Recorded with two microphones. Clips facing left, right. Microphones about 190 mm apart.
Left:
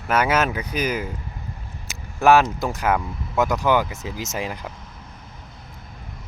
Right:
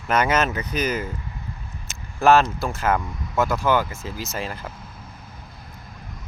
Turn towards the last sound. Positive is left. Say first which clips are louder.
# left 2 dB
turn(degrees=15)  # may be behind; listen again after turning